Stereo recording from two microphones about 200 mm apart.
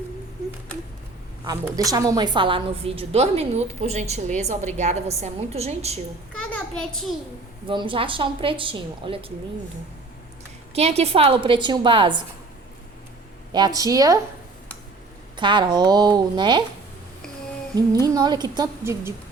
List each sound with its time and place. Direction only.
1.5 s a woman's voice: 20° right (ahead or behind)
6.4 s a sound: 5° left (ahead or behind)
7.7 s a woman's voice: 25° right (ahead or behind)
10.8 s a woman's voice: 30° right (ahead or behind)
13.5 s a woman's voice: 20° right (ahead or behind)
15.4 s a woman's voice: 25° right (ahead or behind)
18.0 s a woman's voice: 20° right (ahead or behind)